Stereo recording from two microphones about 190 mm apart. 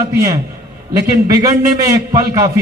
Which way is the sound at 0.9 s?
20° right (ahead or behind).